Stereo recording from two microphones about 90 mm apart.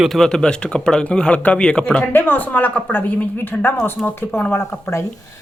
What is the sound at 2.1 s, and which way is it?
A woman's voice, 25° left (ahead or behind).